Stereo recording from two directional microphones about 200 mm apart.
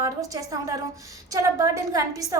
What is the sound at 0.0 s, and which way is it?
A woman's voice, 15° right (ahead or behind).